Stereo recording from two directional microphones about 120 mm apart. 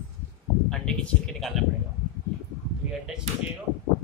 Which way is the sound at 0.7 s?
5° left (ahead or behind).